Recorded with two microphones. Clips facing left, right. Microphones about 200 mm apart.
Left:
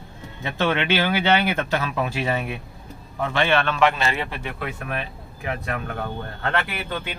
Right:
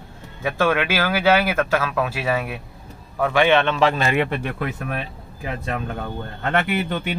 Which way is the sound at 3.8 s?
40° right (ahead or behind).